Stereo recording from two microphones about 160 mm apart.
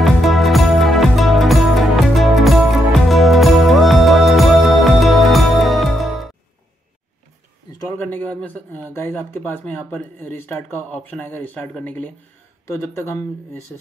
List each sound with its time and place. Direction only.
0.0 s music: centre (ahead or behind)
8.0 s speech: 10° left (ahead or behind)